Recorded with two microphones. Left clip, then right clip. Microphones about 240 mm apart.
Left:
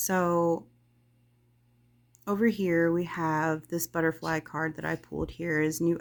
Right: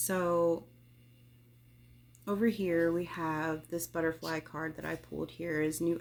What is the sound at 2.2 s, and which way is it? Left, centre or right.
Speech, left.